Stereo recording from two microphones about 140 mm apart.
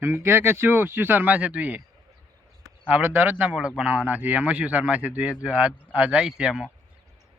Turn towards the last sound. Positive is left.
turn(degrees=-5)  # may be behind; listen again after turning